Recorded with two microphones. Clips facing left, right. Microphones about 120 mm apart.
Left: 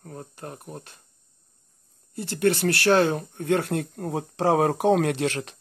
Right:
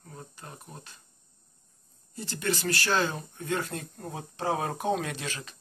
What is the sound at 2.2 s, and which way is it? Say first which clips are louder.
Speech: left 9 dB; 65° left (ahead or behind).